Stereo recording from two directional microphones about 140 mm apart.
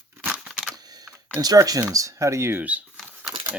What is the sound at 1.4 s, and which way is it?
Speech, 25° right (ahead or behind).